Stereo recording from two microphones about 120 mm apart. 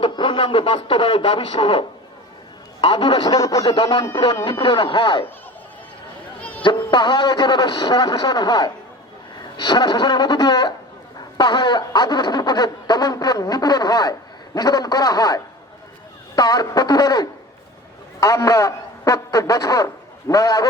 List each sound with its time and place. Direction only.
0.0 s speech: 40° left (ahead or behind)
2.8 s speech: 50° left (ahead or behind)
3.2 s a sound: 30° left (ahead or behind)
4.6 s speech: 45° left (ahead or behind)
6.6 s a sound: 40° left (ahead or behind)
18.2 s a man's voice: 25° left (ahead or behind)